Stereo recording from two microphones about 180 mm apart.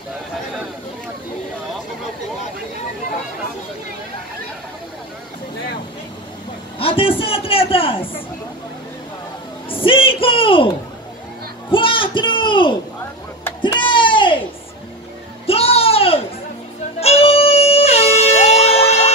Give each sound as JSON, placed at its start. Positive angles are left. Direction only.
{"t": 6.8, "sound": "a man's voice", "side_deg": 30}
{"t": 9.7, "sound": "a man's voice", "side_deg": 30}
{"t": 11.7, "sound": "a sound", "side_deg": 30}
{"t": 15.4, "sound": "music", "side_deg": 35}
{"t": 17.0, "sound": "air horn", "side_deg": 35}